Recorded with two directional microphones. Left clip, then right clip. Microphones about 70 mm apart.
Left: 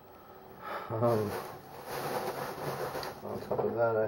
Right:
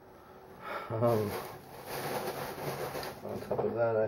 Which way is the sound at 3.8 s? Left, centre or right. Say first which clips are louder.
Even; centre.